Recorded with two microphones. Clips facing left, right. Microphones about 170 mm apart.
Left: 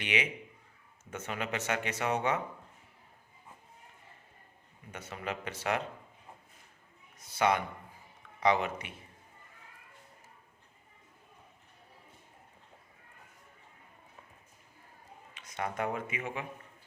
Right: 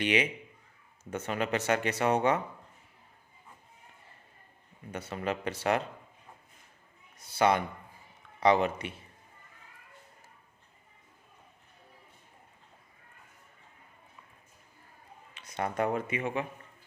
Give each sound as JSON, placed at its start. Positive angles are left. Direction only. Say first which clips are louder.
{"t": 0.0, "sound": "speech", "louder": "right 6 dB", "side_deg": -35}
{"t": 4.9, "sound": "speech", "louder": "right 5 dB", "side_deg": -35}
{"t": 7.3, "sound": "speech", "louder": "right 3 dB", "side_deg": -35}
{"t": 15.4, "sound": "a man's voice", "louder": "right 4 dB", "side_deg": -35}